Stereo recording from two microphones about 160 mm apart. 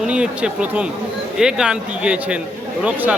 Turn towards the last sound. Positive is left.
turn(degrees=-10)  # may be behind; listen again after turning